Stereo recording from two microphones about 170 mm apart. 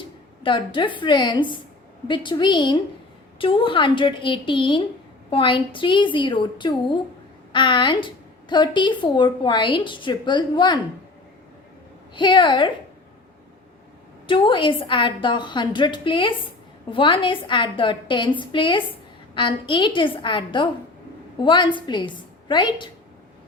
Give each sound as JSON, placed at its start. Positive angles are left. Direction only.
{"t": 0.0, "sound": "a woman's voice", "side_deg": 30}
{"t": 12.1, "sound": "a woman's voice", "side_deg": 25}
{"t": 14.3, "sound": "a woman's voice", "side_deg": 30}